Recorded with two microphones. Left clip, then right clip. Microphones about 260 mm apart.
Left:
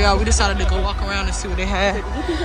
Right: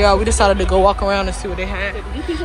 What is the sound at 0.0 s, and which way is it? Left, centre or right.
Speech, centre.